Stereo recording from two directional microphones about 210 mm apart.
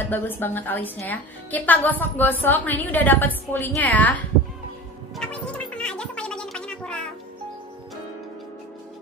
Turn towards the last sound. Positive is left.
turn(degrees=5)  # may be behind; listen again after turning